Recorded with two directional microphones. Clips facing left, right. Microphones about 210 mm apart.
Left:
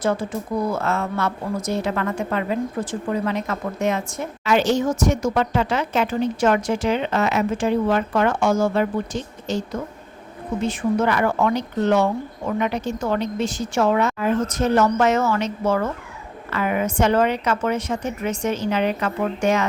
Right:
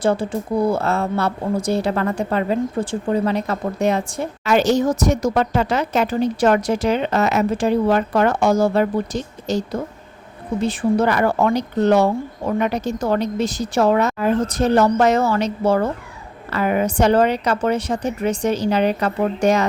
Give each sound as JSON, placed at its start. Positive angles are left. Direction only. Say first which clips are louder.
{"t": 0.0, "sound": "speech", "louder": "right 3 dB", "side_deg": -30}